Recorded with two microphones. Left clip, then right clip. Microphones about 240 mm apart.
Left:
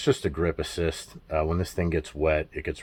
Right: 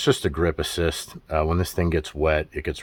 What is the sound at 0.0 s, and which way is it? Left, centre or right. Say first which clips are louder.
Speech: right 3 dB; right.